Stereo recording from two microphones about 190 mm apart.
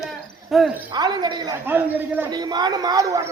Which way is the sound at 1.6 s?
10° right (ahead or behind).